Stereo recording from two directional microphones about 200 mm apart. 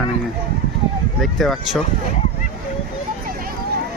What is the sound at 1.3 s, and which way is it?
Speech, centre (ahead or behind).